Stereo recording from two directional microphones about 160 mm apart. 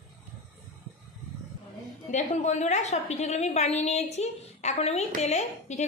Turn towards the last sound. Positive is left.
turn(degrees=45)  # may be behind; listen again after turning